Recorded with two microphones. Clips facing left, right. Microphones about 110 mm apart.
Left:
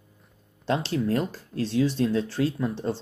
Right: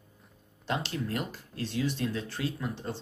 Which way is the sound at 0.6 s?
35° left (ahead or behind).